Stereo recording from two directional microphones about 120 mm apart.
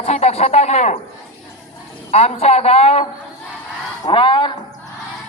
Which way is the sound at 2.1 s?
60° left (ahead or behind).